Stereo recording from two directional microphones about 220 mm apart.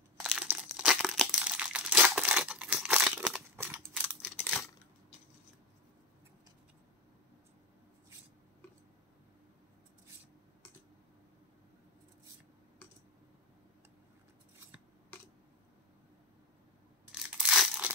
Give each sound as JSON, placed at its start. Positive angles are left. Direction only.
{"t": 0.2, "sound": "crumpling", "side_deg": 0}
{"t": 3.9, "sound": "a sound", "side_deg": 5}
{"t": 17.1, "sound": "crushing", "side_deg": -5}